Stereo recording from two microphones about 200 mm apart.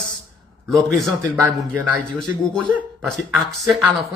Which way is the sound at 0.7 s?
Centre (ahead or behind).